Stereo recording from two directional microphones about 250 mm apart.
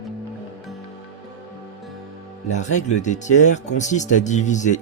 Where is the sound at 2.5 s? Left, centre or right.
Left.